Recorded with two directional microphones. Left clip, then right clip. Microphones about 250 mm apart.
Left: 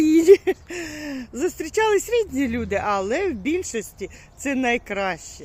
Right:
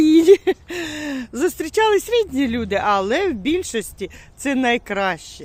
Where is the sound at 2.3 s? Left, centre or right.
Centre.